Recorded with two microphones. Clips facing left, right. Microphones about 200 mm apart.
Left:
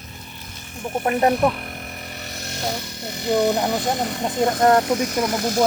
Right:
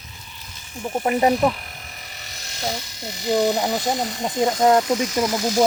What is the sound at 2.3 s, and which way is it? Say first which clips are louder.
Speech: left 1 dB; 55° left (ahead or behind).